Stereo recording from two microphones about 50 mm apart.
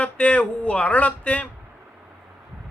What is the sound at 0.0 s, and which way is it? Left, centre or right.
A man's voice, left.